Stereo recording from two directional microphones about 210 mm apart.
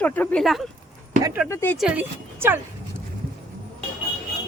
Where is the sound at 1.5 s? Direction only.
10° left (ahead or behind).